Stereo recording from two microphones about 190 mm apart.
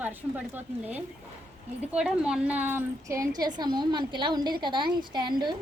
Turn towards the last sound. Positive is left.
turn(degrees=-25)  # may be behind; listen again after turning